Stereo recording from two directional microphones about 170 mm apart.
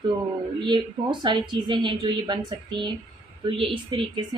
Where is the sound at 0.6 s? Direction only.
25° right (ahead or behind).